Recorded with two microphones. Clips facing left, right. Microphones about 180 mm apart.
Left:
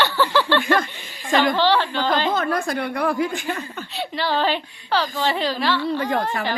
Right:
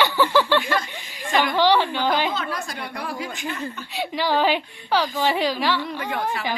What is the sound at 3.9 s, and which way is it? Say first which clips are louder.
A woman's voice: right 1 dB; 10° right (ahead or behind).